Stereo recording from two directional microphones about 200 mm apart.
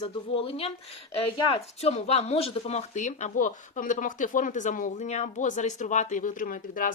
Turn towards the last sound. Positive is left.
turn(degrees=45)  # may be behind; listen again after turning